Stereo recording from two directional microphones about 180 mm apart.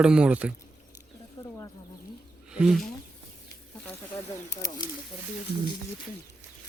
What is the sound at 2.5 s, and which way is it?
Speech, centre (ahead or behind).